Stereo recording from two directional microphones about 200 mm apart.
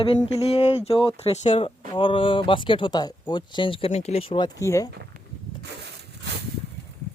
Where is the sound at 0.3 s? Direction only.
30° left (ahead or behind).